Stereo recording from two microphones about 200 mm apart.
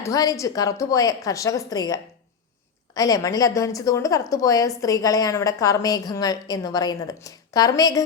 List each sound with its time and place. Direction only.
0.0 s a woman's voice: 15° left (ahead or behind)